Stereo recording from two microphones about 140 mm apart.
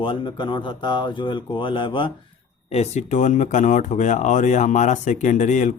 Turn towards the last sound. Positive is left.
turn(degrees=60)  # may be behind; listen again after turning